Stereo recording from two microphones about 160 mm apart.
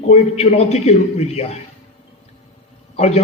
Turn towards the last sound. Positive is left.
turn(degrees=40)  # may be behind; listen again after turning